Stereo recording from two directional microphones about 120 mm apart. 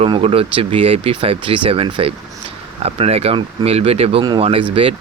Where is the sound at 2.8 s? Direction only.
60° right (ahead or behind).